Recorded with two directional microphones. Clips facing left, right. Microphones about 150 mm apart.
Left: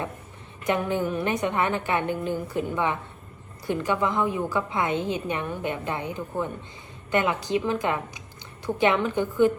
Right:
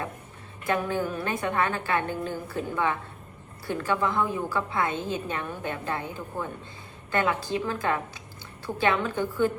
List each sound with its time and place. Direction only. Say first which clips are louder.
0.6 s a woman's voice: left 2 dB; 20° left (ahead or behind)